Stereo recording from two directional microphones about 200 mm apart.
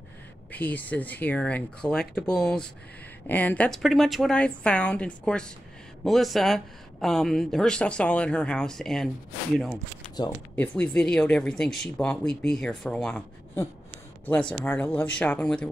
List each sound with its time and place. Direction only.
0.5 s speech: 10° left (ahead or behind)
10.5 s speech: 5° left (ahead or behind)